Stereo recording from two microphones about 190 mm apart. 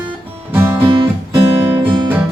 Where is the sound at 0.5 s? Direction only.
10° right (ahead or behind).